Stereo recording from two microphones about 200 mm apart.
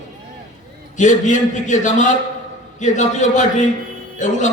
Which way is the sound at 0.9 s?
40° left (ahead or behind).